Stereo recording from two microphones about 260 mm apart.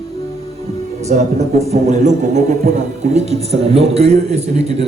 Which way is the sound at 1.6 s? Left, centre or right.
Right.